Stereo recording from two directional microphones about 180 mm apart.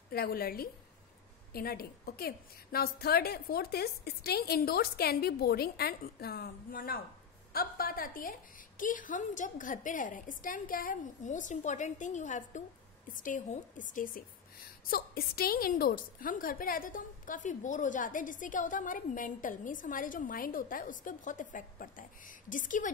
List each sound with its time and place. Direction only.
0.1 s a woman's voice: 55° left (ahead or behind)